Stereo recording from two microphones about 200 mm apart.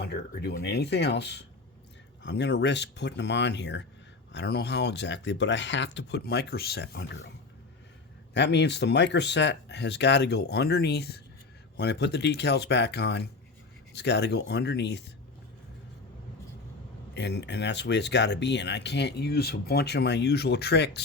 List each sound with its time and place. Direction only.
0.0 s speech: 55° left (ahead or behind)
8.3 s speech: 60° left (ahead or behind)
17.2 s speech: 60° left (ahead or behind)